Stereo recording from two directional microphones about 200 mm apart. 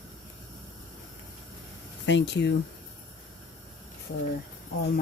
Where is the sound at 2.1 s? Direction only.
60° left (ahead or behind).